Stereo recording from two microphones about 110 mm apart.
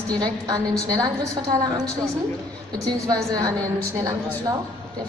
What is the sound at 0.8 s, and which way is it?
Speech, 35° right (ahead or behind).